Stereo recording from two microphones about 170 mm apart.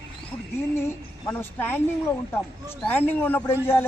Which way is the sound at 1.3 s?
10° left (ahead or behind).